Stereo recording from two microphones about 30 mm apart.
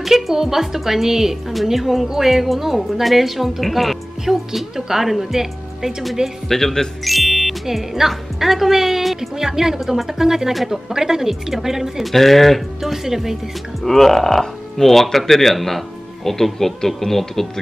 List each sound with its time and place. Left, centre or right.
0.0 s a woman's voice: centre
4.3 s speech: centre
6.5 s speech: centre
7.1 s music: centre
7.6 s speech: centre
10.5 s a woman's voice: centre
10.9 s speech: centre
12.0 s speech: centre
12.8 s speech: centre
13.8 s speech: centre